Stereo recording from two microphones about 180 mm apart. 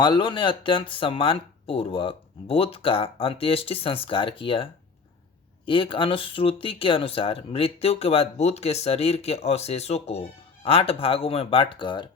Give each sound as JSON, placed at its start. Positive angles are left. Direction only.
{"t": 0.0, "sound": "speech", "side_deg": 25}